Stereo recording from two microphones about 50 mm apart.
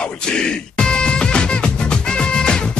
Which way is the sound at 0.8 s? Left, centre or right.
Centre.